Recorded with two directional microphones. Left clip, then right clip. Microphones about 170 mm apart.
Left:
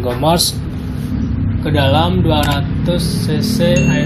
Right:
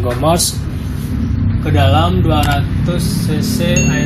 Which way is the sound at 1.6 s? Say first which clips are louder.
Even; 15° left (ahead or behind).